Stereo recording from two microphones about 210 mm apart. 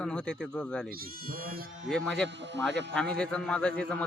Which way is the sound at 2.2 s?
55° right (ahead or behind).